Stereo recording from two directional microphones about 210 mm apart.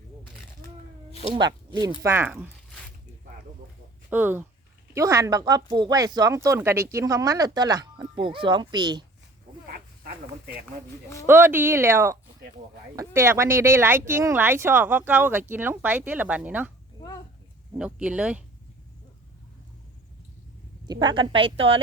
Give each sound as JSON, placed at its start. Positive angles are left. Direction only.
{"t": 2.0, "sound": "speech", "side_deg": -10}
{"t": 4.1, "sound": "speech", "side_deg": -10}
{"t": 9.6, "sound": "a sound", "side_deg": -45}
{"t": 11.3, "sound": "speech", "side_deg": -10}
{"t": 17.7, "sound": "speech", "side_deg": -5}
{"t": 20.8, "sound": "a woman's voice", "side_deg": -20}